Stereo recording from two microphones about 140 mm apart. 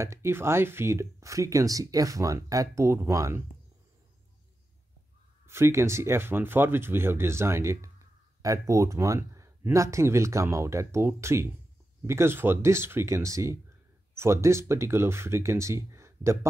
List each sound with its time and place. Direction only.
0.0 s speech: 20° right (ahead or behind)
5.5 s speech: 20° right (ahead or behind)